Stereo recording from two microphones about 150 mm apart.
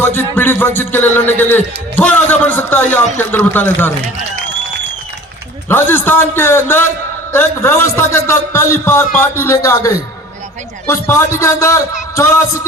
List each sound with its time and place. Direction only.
0.0 s music: 15° left (ahead or behind)
5.6 s music: 15° left (ahead or behind)
10.8 s a man's voice: 20° left (ahead or behind)